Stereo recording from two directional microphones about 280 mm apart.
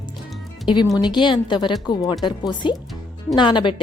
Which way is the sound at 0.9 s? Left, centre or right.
Centre.